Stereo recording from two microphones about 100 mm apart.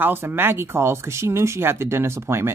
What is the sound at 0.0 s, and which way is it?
Speech, 20° right (ahead or behind).